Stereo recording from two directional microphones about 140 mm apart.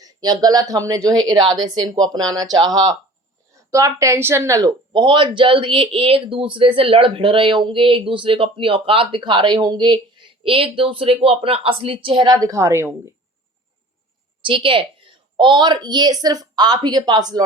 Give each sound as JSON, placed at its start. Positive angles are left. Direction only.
{"t": 0.0, "sound": "speech", "side_deg": -30}
{"t": 14.4, "sound": "speech", "side_deg": -40}